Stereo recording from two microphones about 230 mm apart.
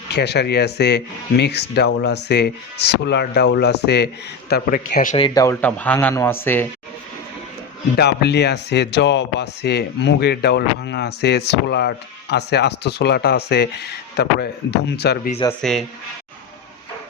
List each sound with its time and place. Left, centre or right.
0.1 s speech: left; by 6.7 s centre
7.9 s speech: left
15.4 s speech: centre